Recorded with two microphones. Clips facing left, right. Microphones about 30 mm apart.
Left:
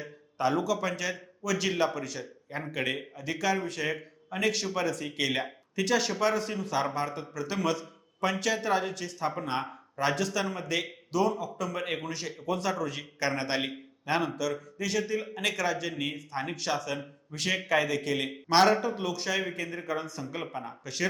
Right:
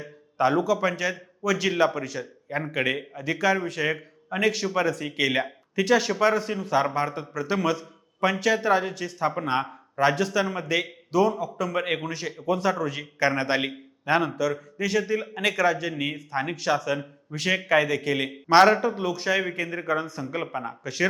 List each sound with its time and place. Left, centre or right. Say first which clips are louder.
0.0 s a man's voice: right 6 dB; centre